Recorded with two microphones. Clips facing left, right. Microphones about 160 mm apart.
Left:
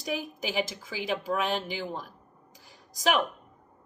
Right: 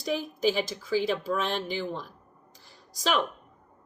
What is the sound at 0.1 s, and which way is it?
Speech, 15° left (ahead or behind).